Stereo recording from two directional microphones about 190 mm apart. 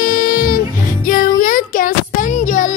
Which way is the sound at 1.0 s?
50° left (ahead or behind).